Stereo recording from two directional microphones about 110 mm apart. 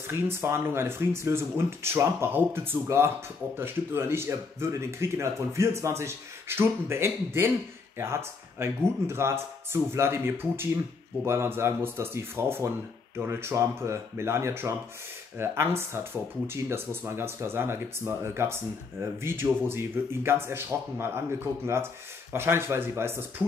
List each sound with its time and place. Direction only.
0.1 s speech: 20° right (ahead or behind)
8.5 s speech: 25° right (ahead or behind)
22.3 s speech: 20° right (ahead or behind)